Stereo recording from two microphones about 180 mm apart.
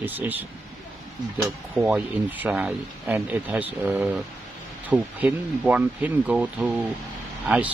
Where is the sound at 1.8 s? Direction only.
10° right (ahead or behind).